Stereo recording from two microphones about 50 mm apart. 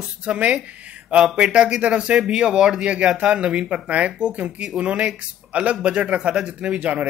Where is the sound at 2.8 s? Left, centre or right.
Right.